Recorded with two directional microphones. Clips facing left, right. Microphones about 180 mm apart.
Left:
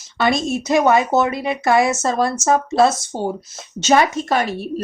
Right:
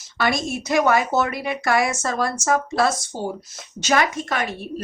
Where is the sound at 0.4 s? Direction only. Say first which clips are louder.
Left 3 dB; 25° left (ahead or behind).